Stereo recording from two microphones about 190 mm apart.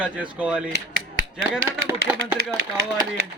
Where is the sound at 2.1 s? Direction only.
10° right (ahead or behind).